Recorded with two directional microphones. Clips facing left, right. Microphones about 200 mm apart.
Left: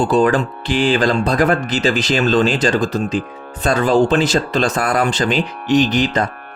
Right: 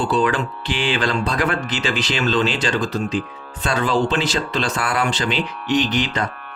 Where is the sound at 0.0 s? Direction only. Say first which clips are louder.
Left 5 dB; 45° left (ahead or behind).